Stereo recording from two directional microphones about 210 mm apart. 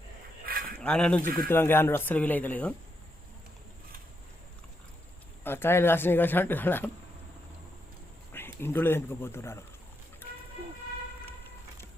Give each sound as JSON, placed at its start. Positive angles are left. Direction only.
{"t": 0.4, "sound": "honk", "side_deg": -45}
{"t": 0.8, "sound": "speech", "side_deg": 5}
{"t": 5.4, "sound": "speech", "side_deg": 10}
{"t": 8.3, "sound": "speech", "side_deg": 10}